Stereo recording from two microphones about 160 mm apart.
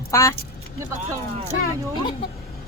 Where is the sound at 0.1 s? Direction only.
20° left (ahead or behind).